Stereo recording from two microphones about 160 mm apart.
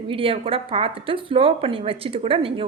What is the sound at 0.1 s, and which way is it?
A woman's voice, 35° right (ahead or behind).